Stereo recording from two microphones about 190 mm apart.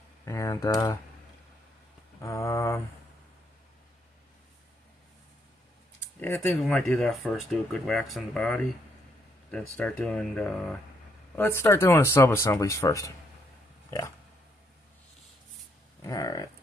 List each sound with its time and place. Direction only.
0.2 s speech: 15° left (ahead or behind)
2.2 s a sound: 15° left (ahead or behind)
6.1 s speech: 10° left (ahead or behind)
13.8 s pig: 15° left (ahead or behind)
16.0 s speech: 15° left (ahead or behind)